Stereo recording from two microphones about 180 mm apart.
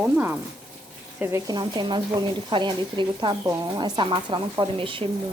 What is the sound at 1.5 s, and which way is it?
Speech, 25° right (ahead or behind).